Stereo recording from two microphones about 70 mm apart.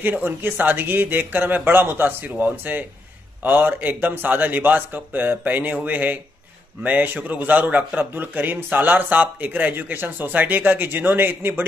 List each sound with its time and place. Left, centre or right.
0.0 s a man's voice: right